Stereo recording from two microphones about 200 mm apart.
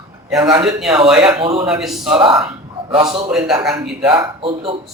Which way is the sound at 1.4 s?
25° right (ahead or behind).